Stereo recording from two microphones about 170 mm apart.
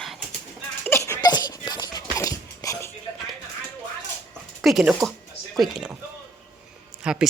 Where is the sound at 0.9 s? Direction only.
15° left (ahead or behind).